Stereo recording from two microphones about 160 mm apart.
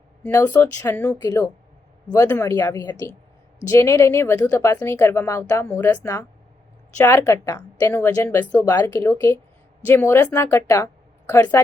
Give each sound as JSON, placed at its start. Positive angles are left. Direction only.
{"t": 0.2, "sound": "speech", "side_deg": 15}